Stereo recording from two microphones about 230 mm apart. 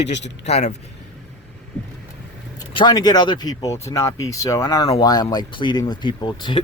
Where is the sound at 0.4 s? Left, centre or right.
Left.